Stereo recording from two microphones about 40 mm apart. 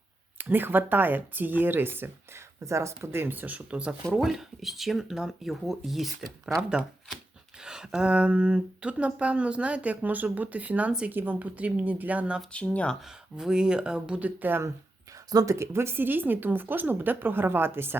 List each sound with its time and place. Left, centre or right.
0.3 s a woman's voice: right
3.1 s a woman's voice: right
3.7 s speech: right
4.2 s speech: centre
6.4 s speech: right
11.1 s speech: right
11.3 s speech: right
12.6 s speech: left
13.0 s speech: centre
14.2 s speech: right
15.6 s a woman's voice: right